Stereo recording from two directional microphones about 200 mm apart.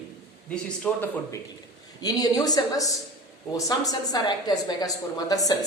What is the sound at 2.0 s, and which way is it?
A woman's voice, 20° left (ahead or behind).